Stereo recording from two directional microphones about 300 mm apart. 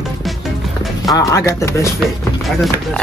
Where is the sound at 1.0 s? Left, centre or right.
Centre.